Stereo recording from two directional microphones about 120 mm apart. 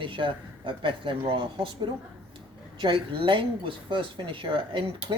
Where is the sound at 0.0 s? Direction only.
45° right (ahead or behind).